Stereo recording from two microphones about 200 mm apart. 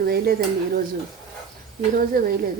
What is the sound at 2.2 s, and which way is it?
Speech, 45° right (ahead or behind).